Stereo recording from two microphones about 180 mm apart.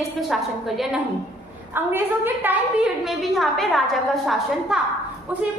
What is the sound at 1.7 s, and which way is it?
A woman's voice, 10° right (ahead or behind).